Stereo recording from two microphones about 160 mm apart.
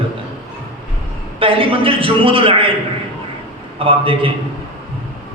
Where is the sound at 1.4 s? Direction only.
35° right (ahead or behind).